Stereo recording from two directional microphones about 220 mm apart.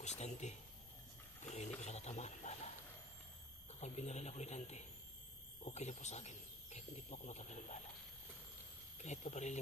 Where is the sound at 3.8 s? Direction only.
30° left (ahead or behind).